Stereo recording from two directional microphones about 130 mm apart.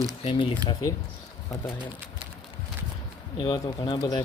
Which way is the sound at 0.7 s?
25° left (ahead or behind).